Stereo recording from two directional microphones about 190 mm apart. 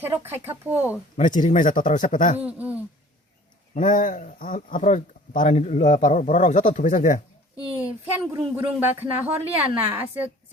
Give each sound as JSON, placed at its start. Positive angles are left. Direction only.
{"t": 0.0, "sound": "speech", "side_deg": -10}
{"t": 1.1, "sound": "speech", "side_deg": 45}
{"t": 2.4, "sound": "speech", "side_deg": -10}
{"t": 3.8, "sound": "speech", "side_deg": 45}
{"t": 7.8, "sound": "speech", "side_deg": -10}